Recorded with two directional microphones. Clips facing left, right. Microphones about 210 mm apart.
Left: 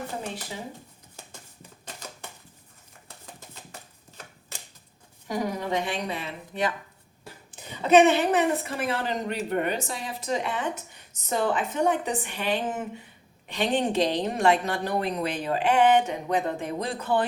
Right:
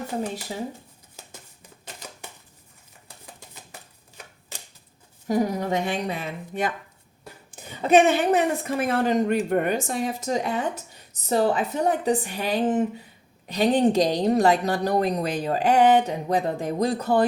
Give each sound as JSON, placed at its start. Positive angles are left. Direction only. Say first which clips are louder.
{"t": 5.3, "sound": "a woman's voice", "louder": "right 5 dB", "side_deg": -45}